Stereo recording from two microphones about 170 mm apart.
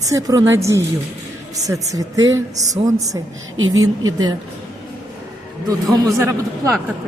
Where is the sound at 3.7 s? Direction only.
25° right (ahead or behind).